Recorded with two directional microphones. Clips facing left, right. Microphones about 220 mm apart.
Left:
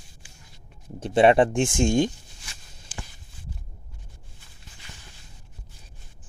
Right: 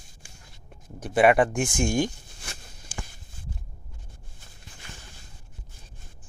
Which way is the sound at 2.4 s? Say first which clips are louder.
Right 6 dB; 55° right (ahead or behind).